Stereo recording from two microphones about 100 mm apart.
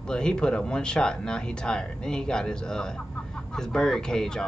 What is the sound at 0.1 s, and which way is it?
Speech, 10° left (ahead or behind).